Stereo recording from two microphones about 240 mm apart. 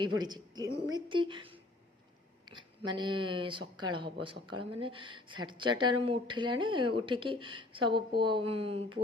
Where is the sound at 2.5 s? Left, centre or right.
Centre.